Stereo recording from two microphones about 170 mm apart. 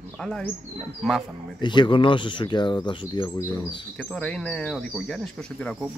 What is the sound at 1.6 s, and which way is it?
Speech, 25° left (ahead or behind).